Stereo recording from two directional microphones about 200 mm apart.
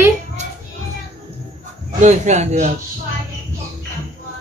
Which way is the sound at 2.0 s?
35° right (ahead or behind).